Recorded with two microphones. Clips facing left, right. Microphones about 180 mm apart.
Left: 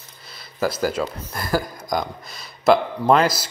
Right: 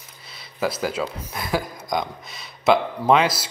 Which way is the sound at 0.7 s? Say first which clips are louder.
Left 2 dB; 5° right (ahead or behind).